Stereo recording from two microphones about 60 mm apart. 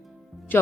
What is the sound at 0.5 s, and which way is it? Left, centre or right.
Speech, left.